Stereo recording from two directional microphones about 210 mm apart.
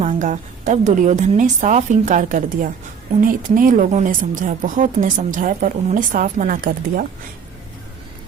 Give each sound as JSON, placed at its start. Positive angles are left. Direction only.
{"t": 0.0, "sound": "speech", "side_deg": -35}